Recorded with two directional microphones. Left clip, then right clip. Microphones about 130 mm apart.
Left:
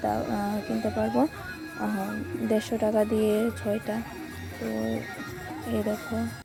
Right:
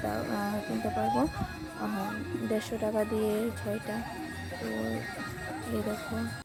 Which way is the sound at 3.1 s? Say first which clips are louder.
Left 5 dB; 20° right (ahead or behind).